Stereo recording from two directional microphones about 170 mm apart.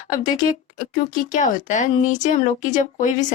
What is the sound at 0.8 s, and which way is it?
Speech, 50° left (ahead or behind).